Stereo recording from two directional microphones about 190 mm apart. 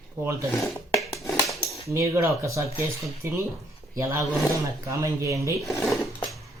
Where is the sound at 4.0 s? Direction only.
15° right (ahead or behind).